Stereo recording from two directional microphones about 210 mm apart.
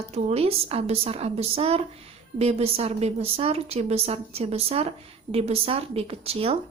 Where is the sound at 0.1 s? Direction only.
30° right (ahead or behind).